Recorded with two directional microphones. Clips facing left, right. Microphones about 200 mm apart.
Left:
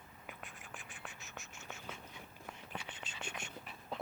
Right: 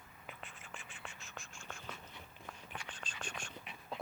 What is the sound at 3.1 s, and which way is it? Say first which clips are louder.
Whispering: even; 10° left (ahead or behind).